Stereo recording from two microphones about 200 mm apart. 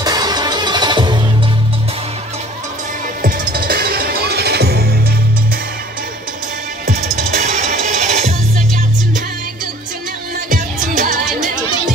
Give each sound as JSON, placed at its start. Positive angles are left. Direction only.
{"t": 0.0, "sound": "music", "side_deg": -20}
{"t": 3.2, "sound": "music", "side_deg": -45}
{"t": 6.9, "sound": "music", "side_deg": -35}
{"t": 10.5, "sound": "music", "side_deg": -40}